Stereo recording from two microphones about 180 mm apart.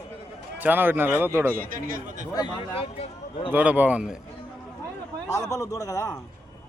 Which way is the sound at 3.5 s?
10° right (ahead or behind).